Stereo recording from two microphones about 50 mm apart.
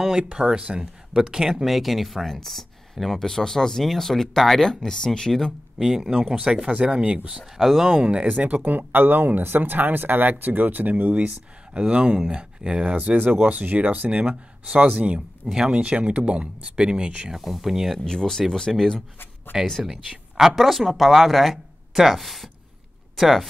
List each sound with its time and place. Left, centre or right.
0.0 s speech: centre
5.8 s speech: centre
7.3 s speech: centre
7.9 s speech: right
11.7 s speech: right
15.4 s speech: centre
15.7 s speech: right
17.3 s speech: centre
18.0 s speech: centre
19.5 s speech: centre